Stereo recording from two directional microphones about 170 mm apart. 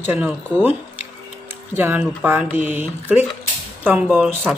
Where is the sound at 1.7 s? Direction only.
10° right (ahead or behind).